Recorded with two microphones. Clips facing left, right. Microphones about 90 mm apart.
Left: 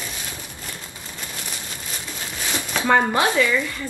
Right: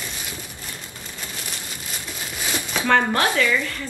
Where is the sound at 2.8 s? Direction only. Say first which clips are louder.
Left 1 dB; 15° left (ahead or behind).